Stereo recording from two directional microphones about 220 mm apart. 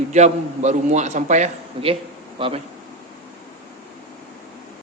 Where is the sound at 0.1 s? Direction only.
30° right (ahead or behind).